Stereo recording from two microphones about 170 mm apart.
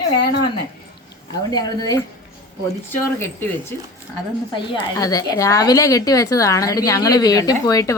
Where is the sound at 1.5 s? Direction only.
20° left (ahead or behind).